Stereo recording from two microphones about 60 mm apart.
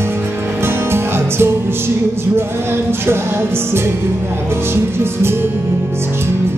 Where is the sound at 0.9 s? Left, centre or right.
Right.